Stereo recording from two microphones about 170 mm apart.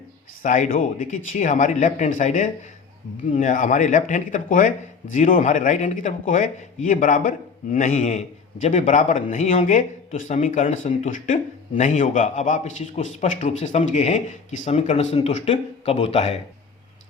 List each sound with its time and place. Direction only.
0.4 s speech: 50° left (ahead or behind)